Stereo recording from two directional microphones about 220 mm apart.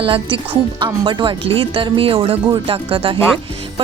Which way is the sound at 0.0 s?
25° right (ahead or behind).